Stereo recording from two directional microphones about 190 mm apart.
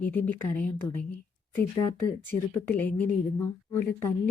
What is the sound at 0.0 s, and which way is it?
Speech, 10° left (ahead or behind).